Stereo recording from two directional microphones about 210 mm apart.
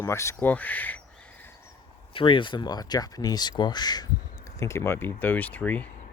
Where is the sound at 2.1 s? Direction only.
25° left (ahead or behind); by 5.9 s 10° left (ahead or behind).